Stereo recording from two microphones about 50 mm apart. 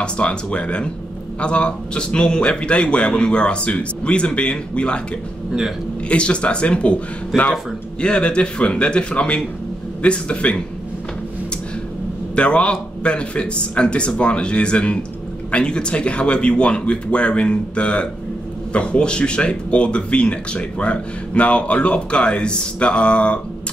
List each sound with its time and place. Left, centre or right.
0.0 s speech: left
6.0 s speech: left
12.4 s speech: left